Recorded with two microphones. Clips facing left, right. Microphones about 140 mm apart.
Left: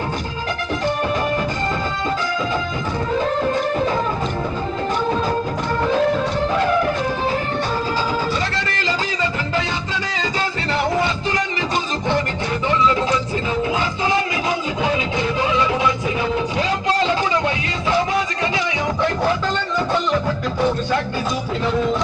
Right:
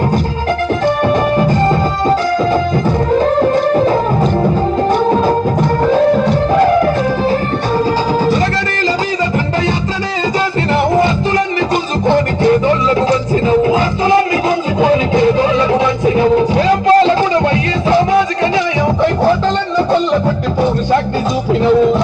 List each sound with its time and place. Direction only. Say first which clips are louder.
3.2 s music: right 7 dB; 40° right (ahead or behind)
12.0 s music: right 14 dB; 40° right (ahead or behind)
14.8 s music: right 10 dB; 40° right (ahead or behind)